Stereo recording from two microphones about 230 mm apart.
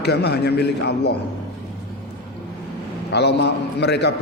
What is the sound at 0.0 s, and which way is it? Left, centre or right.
A man's voice, left.